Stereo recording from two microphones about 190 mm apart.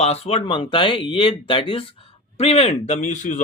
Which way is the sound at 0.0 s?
30° left (ahead or behind).